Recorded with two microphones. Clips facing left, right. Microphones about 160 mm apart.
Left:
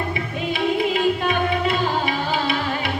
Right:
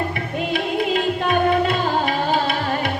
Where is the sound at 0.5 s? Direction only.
50° right (ahead or behind).